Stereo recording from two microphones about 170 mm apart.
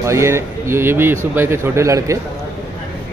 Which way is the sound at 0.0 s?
15° right (ahead or behind).